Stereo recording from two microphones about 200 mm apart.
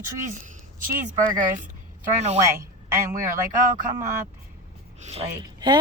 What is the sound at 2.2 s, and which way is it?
Speech, 35° right (ahead or behind).